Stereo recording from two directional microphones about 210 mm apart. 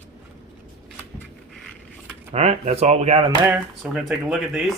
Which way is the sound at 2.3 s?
30° right (ahead or behind).